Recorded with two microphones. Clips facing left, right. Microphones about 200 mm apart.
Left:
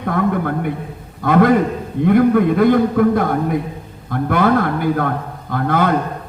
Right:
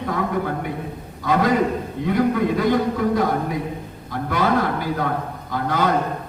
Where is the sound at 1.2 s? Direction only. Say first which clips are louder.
Left 5 dB; 55° left (ahead or behind).